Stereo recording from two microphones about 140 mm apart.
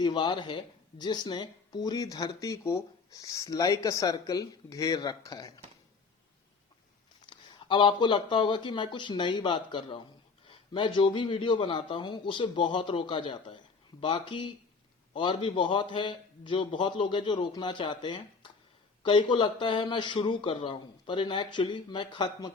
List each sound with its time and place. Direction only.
0.0 s speech: 30° left (ahead or behind)
7.3 s speech: 35° left (ahead or behind)